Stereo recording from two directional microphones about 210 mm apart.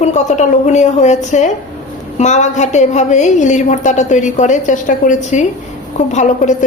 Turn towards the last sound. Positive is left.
turn(degrees=35)  # may be behind; listen again after turning